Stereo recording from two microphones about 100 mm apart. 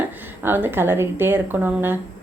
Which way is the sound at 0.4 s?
20° right (ahead or behind).